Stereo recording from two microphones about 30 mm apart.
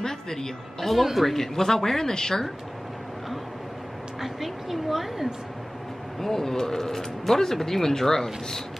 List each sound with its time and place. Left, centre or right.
0.0 s speech: centre
0.8 s speech: centre
1.3 s speech: centre
4.2 s speech: centre
6.1 s speech: centre